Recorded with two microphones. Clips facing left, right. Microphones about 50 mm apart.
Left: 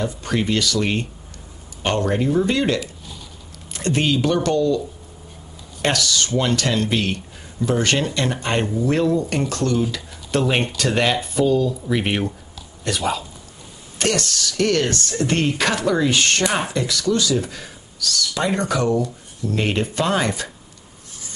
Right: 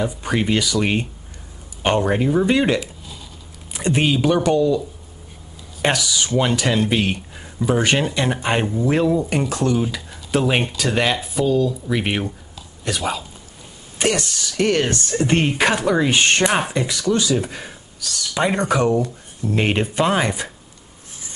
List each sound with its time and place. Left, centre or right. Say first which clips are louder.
0.0 s speech: right 1 dB; centre
13.9 s speech: right 1 dB; centre